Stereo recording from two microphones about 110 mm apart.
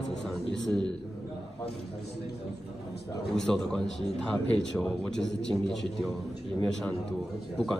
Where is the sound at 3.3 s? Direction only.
5° left (ahead or behind).